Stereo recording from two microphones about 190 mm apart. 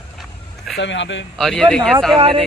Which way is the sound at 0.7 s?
70° left (ahead or behind).